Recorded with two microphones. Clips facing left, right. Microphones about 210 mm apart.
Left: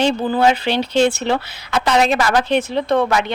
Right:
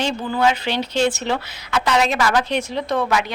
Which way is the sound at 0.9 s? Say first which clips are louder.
Left 4 dB; 60° left (ahead or behind).